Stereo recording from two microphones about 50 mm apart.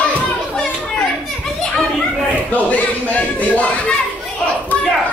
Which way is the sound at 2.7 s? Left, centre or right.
Left.